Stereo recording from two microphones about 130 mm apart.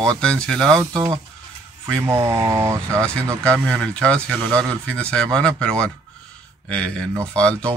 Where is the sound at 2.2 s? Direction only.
25° right (ahead or behind).